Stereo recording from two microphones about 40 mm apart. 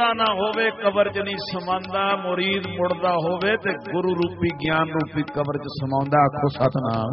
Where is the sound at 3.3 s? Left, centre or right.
Centre.